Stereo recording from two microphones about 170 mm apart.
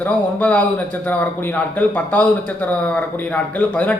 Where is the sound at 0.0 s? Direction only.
10° left (ahead or behind).